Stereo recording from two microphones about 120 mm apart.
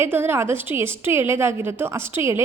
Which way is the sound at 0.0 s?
20° right (ahead or behind).